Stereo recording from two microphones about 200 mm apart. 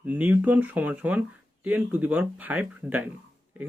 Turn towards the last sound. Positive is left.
turn(degrees=-5)  # may be behind; listen again after turning